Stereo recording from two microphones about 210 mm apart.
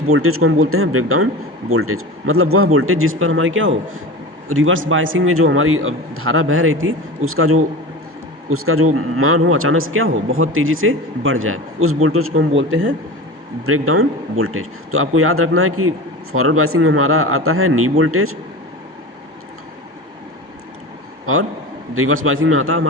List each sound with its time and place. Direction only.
0.1 s speech: 90° right; by 12.9 s 65° right (ahead or behind)
13.7 s speech: 90° right
21.9 s a man's voice: 75° right (ahead or behind)